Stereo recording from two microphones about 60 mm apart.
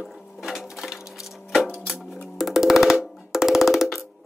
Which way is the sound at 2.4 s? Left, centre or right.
Centre.